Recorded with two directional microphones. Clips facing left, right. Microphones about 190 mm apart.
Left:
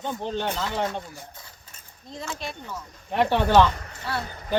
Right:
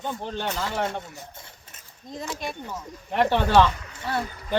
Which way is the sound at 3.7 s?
50° left (ahead or behind).